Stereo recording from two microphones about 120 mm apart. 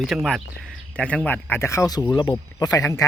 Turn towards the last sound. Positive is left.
turn(degrees=25)  # may be behind; listen again after turning